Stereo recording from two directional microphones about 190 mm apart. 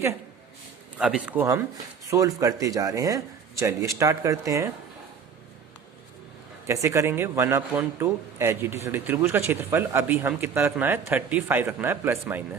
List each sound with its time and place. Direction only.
0.9 s a man's voice: 5° right (ahead or behind)
6.7 s a man's voice: 15° right (ahead or behind)